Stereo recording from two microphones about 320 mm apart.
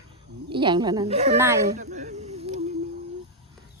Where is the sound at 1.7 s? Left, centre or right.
Right.